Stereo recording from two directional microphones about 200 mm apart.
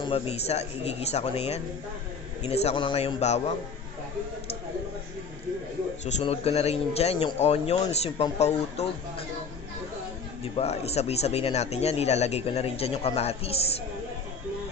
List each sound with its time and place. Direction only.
0.0 s speech: 30° left (ahead or behind)
6.1 s speech: 35° left (ahead or behind)
10.4 s speech: 30° left (ahead or behind)